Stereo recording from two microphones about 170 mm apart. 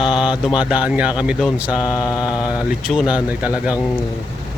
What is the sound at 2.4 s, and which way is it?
Speech, 5° right (ahead or behind).